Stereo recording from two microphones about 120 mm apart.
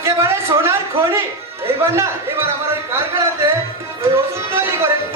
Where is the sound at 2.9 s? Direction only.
20° right (ahead or behind).